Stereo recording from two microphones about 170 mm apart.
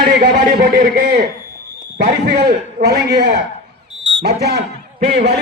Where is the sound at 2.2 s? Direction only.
80° right.